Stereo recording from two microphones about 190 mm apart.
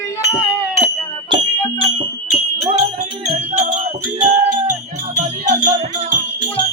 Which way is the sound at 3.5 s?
40° right (ahead or behind).